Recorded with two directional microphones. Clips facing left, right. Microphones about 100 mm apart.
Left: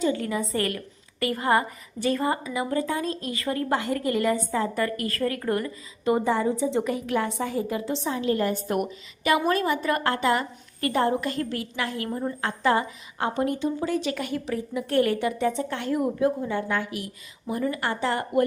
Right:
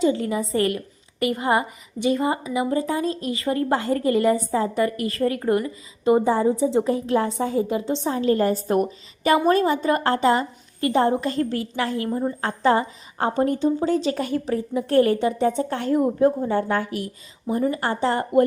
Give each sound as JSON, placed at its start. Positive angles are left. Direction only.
{"t": 0.0, "sound": "a woman's voice", "side_deg": -25}
{"t": 12.0, "sound": "a woman's voice", "side_deg": -15}
{"t": 12.4, "sound": "a woman's voice", "side_deg": -30}
{"t": 17.4, "sound": "a woman's voice", "side_deg": -30}